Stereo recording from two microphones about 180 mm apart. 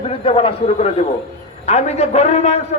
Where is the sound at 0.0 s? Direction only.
30° left (ahead or behind).